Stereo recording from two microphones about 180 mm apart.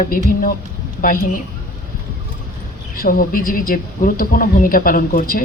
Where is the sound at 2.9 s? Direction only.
50° left (ahead or behind).